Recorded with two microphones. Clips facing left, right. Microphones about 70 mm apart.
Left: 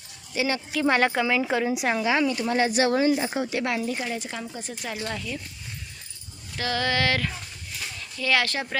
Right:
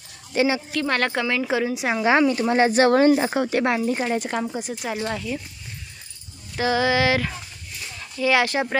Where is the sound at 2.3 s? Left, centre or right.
Right.